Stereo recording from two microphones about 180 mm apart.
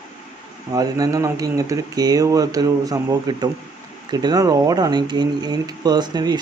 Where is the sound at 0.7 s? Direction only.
20° right (ahead or behind).